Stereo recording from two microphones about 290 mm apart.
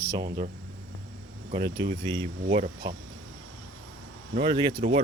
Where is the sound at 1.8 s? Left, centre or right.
Centre.